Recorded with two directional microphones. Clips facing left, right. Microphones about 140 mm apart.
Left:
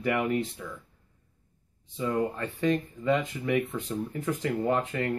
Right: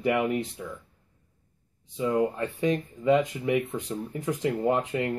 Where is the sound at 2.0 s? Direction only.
15° right (ahead or behind).